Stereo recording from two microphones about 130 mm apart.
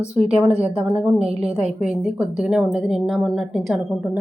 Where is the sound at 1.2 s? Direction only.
50° right (ahead or behind).